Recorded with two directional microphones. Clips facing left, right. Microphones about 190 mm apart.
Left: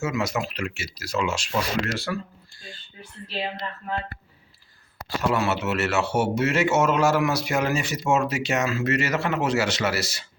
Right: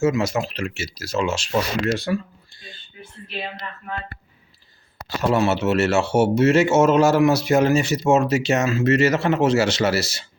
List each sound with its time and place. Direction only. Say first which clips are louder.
0.0 s a man's voice: right 6 dB; 25° right (ahead or behind)
5.3 s a man's voice: right 7 dB; 25° right (ahead or behind)